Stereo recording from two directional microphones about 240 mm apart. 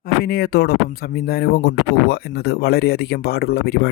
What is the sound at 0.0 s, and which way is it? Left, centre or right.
Speech, left.